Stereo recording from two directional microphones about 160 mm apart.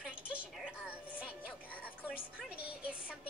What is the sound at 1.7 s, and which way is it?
Music, 10° left (ahead or behind).